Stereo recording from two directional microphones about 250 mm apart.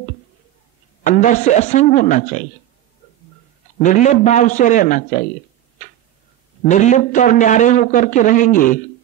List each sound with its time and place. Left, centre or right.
1.0 s a man's voice: left
3.8 s a man's voice: left
6.7 s a man's voice: left